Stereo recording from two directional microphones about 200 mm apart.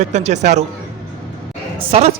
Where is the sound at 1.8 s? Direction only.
30° right (ahead or behind).